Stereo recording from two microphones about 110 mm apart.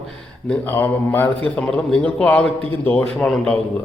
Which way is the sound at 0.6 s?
20° left (ahead or behind).